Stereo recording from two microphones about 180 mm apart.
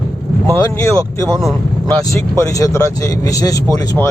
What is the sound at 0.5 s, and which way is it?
Speech, 20° left (ahead or behind).